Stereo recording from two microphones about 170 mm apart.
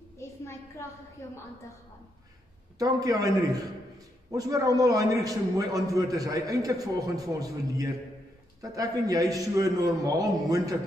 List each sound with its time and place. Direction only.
2.8 s a man's voice: 20° right (ahead or behind)